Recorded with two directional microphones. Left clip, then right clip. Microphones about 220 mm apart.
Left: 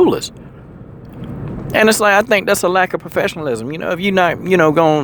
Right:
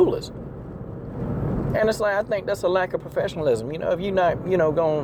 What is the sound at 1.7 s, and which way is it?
Speech, 40° left (ahead or behind).